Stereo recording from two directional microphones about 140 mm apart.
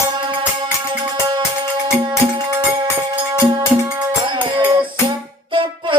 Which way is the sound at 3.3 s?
30° right (ahead or behind).